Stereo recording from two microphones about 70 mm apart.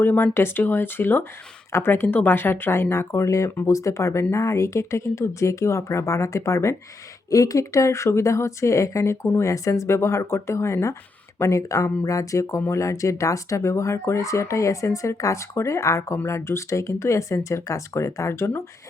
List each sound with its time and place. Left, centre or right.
0.0 s speech: left